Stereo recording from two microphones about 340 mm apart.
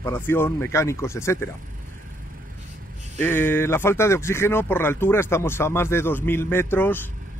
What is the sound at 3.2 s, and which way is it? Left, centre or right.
Speech, centre.